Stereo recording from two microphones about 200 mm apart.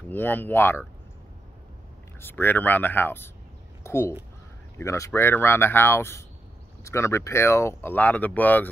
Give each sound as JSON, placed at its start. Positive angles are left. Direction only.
{"t": 0.1, "sound": "speech", "side_deg": 10}
{"t": 2.1, "sound": "speech", "side_deg": 10}